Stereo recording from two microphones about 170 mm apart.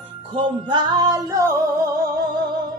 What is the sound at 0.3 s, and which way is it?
Music, 30° right (ahead or behind).